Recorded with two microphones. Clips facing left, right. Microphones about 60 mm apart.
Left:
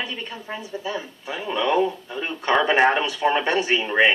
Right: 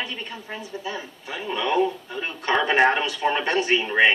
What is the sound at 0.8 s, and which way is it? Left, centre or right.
A woman's voice, centre.